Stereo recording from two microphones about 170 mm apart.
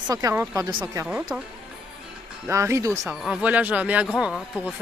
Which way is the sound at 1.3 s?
10° right (ahead or behind).